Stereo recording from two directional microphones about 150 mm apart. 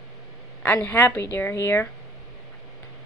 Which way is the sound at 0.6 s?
10° left (ahead or behind).